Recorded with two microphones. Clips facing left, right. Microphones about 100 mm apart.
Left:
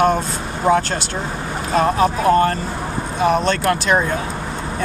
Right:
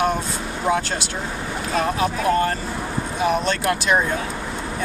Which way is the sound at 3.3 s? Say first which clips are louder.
Left 4 dB; 5° right (ahead or behind).